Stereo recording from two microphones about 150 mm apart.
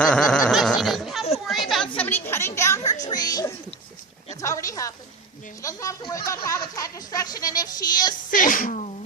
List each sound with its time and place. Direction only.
0.0 s snicker: 5° left (ahead or behind)
1.5 s a sound: centre (ahead or behind)
2.0 s a woman's voice: 15° left (ahead or behind)
8.3 s speech: 65° left (ahead or behind)